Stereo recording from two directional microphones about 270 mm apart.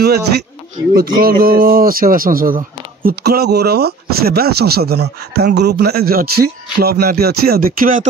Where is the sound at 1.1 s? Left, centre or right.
Right.